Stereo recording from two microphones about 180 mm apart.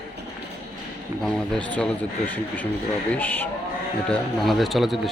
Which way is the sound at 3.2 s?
10° left (ahead or behind).